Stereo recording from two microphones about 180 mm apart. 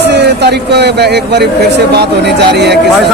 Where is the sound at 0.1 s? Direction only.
70° right (ahead or behind).